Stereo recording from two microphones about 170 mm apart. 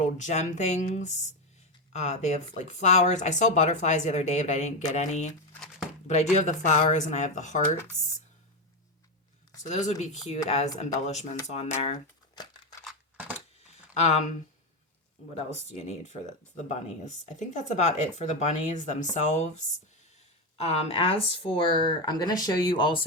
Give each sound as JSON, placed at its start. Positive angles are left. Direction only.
{"t": 0.0, "sound": "speech", "side_deg": 45}
{"t": 6.3, "sound": "speech", "side_deg": 45}
{"t": 9.6, "sound": "speech", "side_deg": 45}
{"t": 12.8, "sound": "crushing", "side_deg": -5}
{"t": 13.9, "sound": "speech", "side_deg": 40}
{"t": 15.7, "sound": "speech", "side_deg": 40}